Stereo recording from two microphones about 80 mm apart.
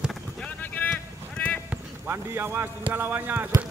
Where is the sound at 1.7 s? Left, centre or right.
Right.